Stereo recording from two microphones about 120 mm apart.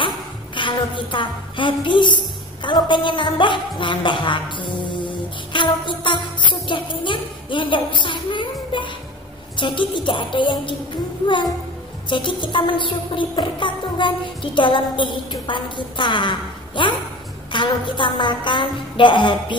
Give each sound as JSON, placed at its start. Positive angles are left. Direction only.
{"t": 0.6, "sound": "a woman's voice", "side_deg": 40}
{"t": 5.5, "sound": "music", "side_deg": 40}
{"t": 6.7, "sound": "a woman's voice", "side_deg": 45}
{"t": 9.6, "sound": "music", "side_deg": 40}
{"t": 12.1, "sound": "music", "side_deg": 40}
{"t": 17.5, "sound": "a woman's voice", "side_deg": 40}